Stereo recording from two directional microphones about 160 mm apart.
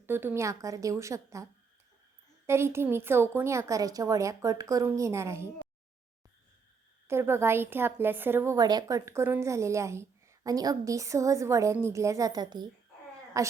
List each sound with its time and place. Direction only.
0.0 s a woman's voice: 15° right (ahead or behind)
2.5 s a woman's voice: 15° right (ahead or behind)
7.1 s a woman's voice: 15° right (ahead or behind)